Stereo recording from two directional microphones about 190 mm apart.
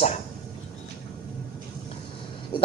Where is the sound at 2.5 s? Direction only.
30° left (ahead or behind).